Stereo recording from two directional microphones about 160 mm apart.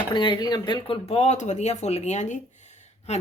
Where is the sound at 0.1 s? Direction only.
30° left (ahead or behind).